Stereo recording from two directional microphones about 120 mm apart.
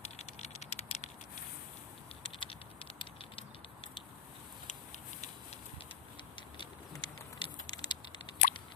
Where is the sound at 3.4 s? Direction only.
45° left (ahead or behind).